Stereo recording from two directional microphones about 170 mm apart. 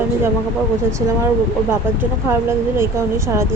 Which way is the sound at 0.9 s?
15° right (ahead or behind).